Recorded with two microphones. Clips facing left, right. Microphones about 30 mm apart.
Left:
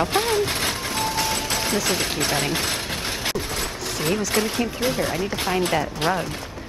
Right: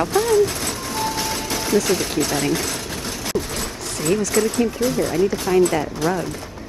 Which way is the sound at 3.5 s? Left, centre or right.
Centre.